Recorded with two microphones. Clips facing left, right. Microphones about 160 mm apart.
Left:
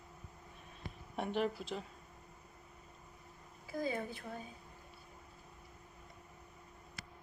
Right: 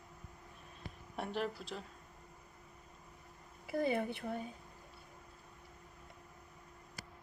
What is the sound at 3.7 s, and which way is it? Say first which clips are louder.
Speech: right 4 dB; 65° right (ahead or behind).